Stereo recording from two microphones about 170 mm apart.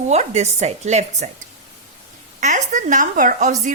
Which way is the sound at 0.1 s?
40° right (ahead or behind).